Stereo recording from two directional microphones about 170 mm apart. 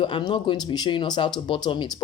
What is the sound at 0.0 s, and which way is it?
Speech, 30° left (ahead or behind).